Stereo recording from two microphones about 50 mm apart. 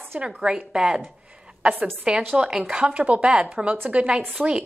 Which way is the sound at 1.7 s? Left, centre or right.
Right.